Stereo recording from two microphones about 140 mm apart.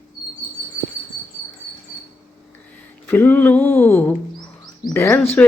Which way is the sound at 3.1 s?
10° left (ahead or behind).